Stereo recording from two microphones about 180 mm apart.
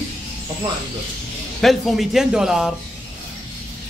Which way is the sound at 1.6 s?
Centre (ahead or behind).